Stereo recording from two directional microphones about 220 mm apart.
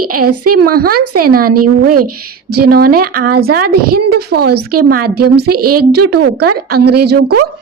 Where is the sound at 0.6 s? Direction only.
45° right (ahead or behind).